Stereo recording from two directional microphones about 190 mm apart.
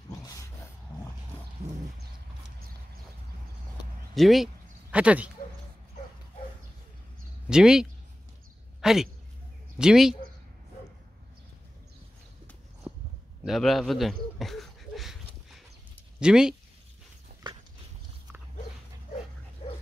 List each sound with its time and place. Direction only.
4.1 s speech: centre (ahead or behind)
7.4 s speech: 5° right (ahead or behind)
8.8 s speech: centre (ahead or behind)
12.9 s a sound: 5° right (ahead or behind)
16.2 s speech: 5° right (ahead or behind)
17.3 s dog: 55° right (ahead or behind)
19.6 s dog: 30° left (ahead or behind)